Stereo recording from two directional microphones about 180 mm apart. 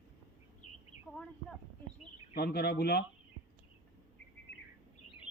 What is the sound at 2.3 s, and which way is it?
Speech, 60° left (ahead or behind).